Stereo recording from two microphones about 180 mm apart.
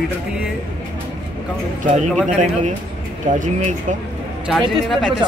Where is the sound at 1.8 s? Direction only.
40° right (ahead or behind).